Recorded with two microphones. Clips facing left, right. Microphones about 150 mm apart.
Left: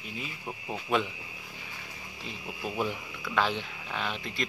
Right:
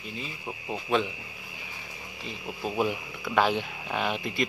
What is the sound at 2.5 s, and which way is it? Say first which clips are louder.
Speech: right 4 dB; 25° right (ahead or behind).